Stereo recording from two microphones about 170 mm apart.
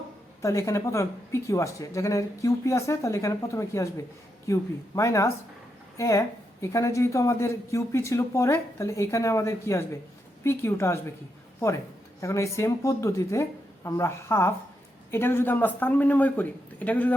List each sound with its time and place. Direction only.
0.4 s speech: 20° left (ahead or behind)
12.2 s speech: 20° left (ahead or behind)